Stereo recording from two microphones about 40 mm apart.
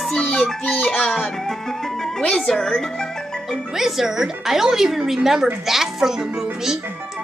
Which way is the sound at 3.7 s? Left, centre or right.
Centre.